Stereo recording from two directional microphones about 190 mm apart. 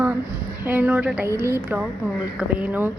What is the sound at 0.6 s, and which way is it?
A woman's voice, 10° right (ahead or behind).